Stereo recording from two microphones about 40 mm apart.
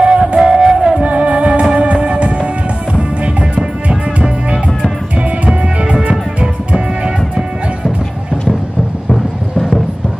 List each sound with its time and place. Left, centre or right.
0.0 s music: right
1.0 s music: right
9.1 s music: centre